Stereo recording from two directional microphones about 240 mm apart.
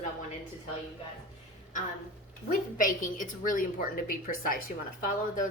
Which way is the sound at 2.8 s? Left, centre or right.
Left.